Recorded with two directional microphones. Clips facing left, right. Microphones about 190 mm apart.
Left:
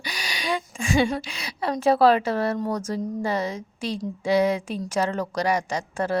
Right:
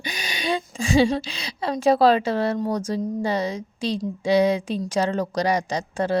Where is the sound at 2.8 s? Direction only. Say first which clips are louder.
Right 2 dB; 15° right (ahead or behind).